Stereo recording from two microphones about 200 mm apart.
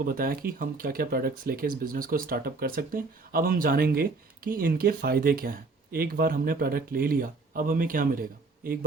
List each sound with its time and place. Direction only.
0.0 s speech: 45° right (ahead or behind)